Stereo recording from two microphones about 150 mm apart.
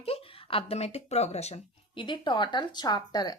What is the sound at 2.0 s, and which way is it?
Speech, 30° left (ahead or behind).